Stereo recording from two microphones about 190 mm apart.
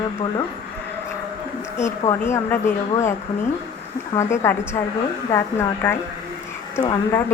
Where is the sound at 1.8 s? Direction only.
15° left (ahead or behind).